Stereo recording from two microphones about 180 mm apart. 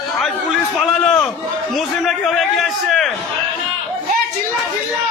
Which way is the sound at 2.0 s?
Centre (ahead or behind).